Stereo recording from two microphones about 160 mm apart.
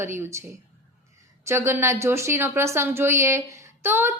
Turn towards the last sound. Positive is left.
turn(degrees=-15)  # may be behind; listen again after turning